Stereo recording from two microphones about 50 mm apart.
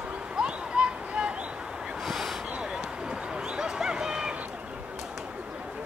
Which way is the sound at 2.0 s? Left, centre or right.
Centre.